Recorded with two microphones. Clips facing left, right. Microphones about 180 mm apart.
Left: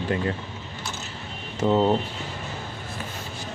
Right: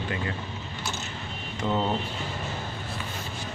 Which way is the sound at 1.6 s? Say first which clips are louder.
Left 7 dB; 20° left (ahead or behind).